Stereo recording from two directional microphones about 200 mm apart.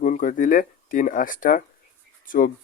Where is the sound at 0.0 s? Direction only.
40° left (ahead or behind).